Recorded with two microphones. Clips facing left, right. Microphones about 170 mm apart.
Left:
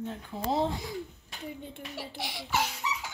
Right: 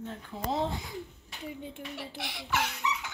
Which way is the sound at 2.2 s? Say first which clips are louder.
Left 1 dB; 5° left (ahead or behind).